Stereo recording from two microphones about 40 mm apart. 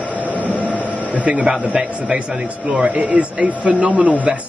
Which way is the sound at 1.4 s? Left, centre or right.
Centre.